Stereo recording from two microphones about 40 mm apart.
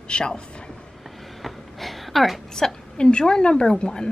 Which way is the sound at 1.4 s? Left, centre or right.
Centre.